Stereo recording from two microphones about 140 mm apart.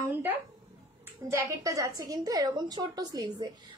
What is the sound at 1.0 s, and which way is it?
A woman's voice, 15° right (ahead or behind).